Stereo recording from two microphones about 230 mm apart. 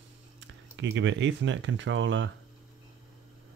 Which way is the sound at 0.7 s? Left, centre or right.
Right.